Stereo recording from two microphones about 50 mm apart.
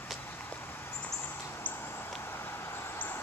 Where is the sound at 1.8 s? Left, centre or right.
Left.